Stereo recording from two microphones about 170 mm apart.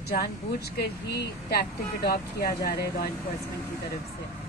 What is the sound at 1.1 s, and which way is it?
Speech, 65° left (ahead or behind).